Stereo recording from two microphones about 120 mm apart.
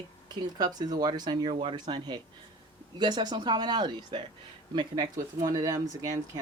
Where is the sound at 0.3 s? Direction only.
35° right (ahead or behind).